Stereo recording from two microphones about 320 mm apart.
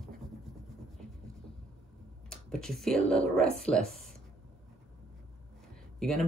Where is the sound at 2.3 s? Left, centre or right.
Centre.